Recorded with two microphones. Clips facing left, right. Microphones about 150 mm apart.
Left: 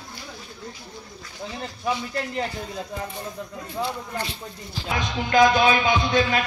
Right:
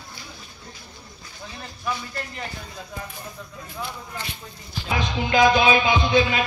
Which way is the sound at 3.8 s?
35° left (ahead or behind).